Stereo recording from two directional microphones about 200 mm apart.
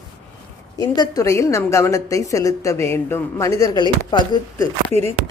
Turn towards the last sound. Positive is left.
turn(degrees=20)  # may be behind; listen again after turning